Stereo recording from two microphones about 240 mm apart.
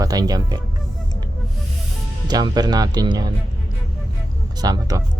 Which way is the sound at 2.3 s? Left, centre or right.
Centre.